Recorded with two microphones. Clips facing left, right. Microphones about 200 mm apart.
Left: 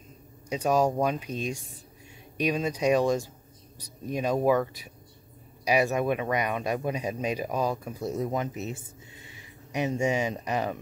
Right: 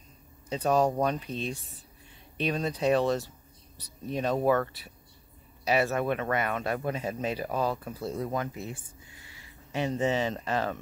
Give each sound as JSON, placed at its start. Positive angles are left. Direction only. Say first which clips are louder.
{"t": 0.5, "sound": "speech", "louder": "left 1 dB", "side_deg": 10}